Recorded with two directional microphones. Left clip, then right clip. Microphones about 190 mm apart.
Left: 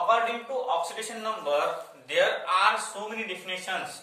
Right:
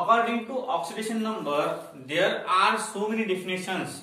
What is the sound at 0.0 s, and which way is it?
A man's voice, 15° left (ahead or behind).